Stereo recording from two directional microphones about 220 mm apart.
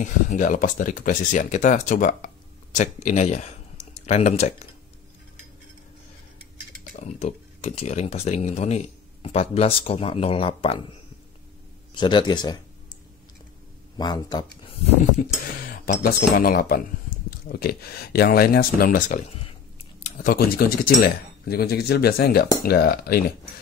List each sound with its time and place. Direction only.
0.0 s speech: 35° left (ahead or behind)
6.8 s speech: 30° left (ahead or behind)
11.9 s speech: 20° left (ahead or behind)
13.9 s speech: 20° left (ahead or behind)
15.6 s speech: 40° left (ahead or behind)